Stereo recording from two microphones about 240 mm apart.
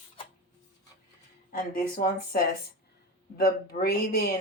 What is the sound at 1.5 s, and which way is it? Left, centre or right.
Speech, left.